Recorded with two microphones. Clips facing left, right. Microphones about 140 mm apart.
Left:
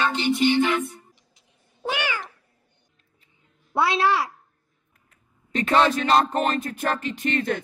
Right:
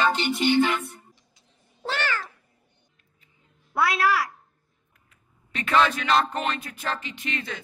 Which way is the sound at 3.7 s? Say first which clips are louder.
Left 2 dB; 25° left (ahead or behind).